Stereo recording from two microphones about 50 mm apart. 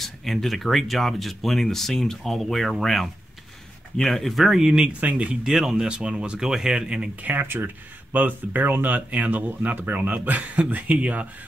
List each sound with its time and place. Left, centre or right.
0.0 s speech: centre
5.0 s speech: right
7.2 s speech: right